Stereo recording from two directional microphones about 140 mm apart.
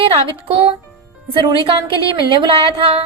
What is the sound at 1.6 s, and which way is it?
Speech, 35° right (ahead or behind).